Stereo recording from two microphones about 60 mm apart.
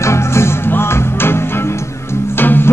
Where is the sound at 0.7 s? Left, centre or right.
Left.